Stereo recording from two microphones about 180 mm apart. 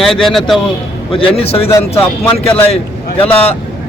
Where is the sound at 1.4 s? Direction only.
35° left (ahead or behind).